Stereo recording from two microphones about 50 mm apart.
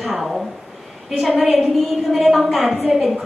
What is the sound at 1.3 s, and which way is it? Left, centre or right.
Speech, right.